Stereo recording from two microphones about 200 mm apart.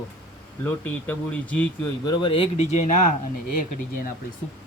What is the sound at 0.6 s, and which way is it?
Speech, 5° left (ahead or behind).